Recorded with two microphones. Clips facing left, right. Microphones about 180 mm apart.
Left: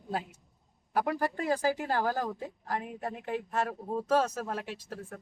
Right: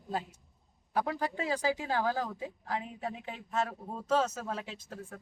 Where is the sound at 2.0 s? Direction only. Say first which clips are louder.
Left 1 dB; 10° left (ahead or behind).